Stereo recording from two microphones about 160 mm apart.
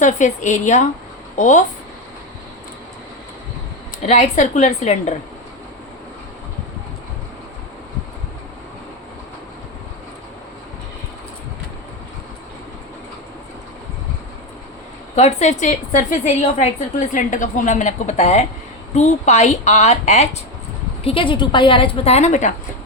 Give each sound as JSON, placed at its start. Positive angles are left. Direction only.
{"t": 0.0, "sound": "a woman's voice", "side_deg": 50}
{"t": 4.0, "sound": "a woman's voice", "side_deg": 45}
{"t": 15.1, "sound": "a woman's voice", "side_deg": 45}